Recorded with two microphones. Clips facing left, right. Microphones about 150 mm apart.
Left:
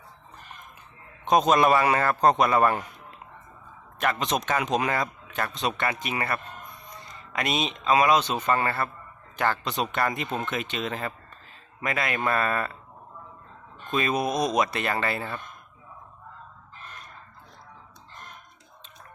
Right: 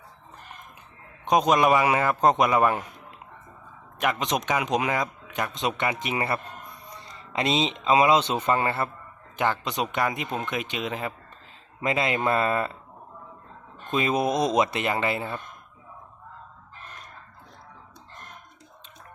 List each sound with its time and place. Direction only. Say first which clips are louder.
1.2 s speech: even; 10° right (ahead or behind)
4.0 s a man's voice: even; 15° right (ahead or behind)
13.9 s speech: right 2 dB; 20° right (ahead or behind)